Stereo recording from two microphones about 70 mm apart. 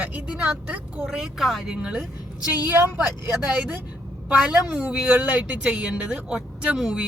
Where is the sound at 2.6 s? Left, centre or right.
Right.